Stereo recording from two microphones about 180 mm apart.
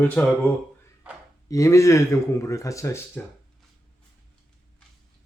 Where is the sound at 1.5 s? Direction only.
15° left (ahead or behind).